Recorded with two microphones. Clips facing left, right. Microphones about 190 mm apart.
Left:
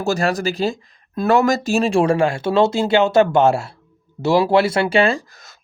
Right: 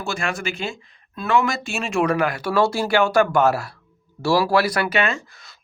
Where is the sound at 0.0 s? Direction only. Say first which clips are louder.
Left 7 dB; 40° left (ahead or behind).